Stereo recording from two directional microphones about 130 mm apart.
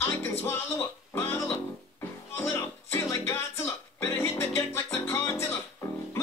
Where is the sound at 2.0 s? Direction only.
20° left (ahead or behind).